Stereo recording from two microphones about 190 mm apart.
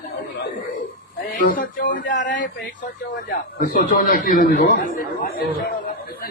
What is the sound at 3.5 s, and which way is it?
Speech, 50° left (ahead or behind).